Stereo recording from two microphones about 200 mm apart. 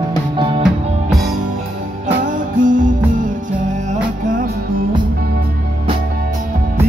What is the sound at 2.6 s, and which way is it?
Music, 40° right (ahead or behind).